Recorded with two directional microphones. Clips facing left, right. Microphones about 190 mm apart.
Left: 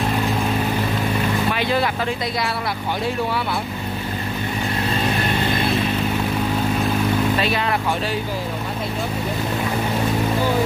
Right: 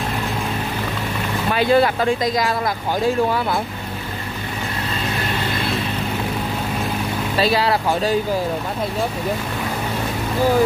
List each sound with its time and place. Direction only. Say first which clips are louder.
1.5 s speech: right 10 dB; 40° right (ahead or behind)
7.3 s speech: right 3 dB; 35° right (ahead or behind)